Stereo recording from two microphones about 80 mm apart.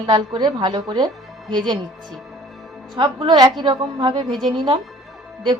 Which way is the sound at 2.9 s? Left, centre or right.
Right.